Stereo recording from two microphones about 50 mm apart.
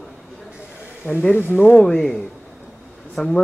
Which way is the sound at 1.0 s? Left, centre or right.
Left.